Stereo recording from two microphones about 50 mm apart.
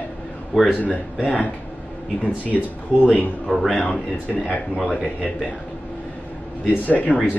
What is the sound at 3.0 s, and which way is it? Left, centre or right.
Speech, left.